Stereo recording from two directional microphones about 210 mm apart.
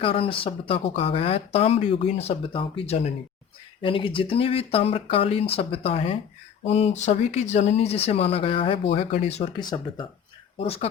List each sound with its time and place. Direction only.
0.0 s speech: 25° left (ahead or behind)